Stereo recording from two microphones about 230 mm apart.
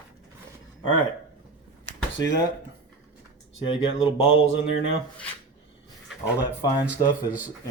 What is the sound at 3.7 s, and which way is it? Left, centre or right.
Speech, left.